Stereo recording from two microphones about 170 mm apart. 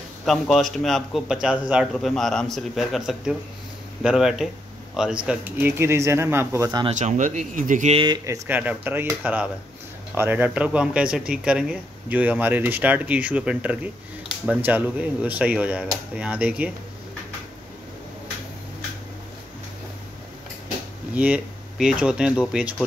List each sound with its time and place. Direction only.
0.2 s speech: centre (ahead or behind); by 6.9 s 20° right (ahead or behind)
7.0 s speech: 45° right (ahead or behind)
8.0 s speech: 25° right (ahead or behind)
8.5 s speech: 10° right (ahead or behind)
21.1 s speech: 10° right (ahead or behind)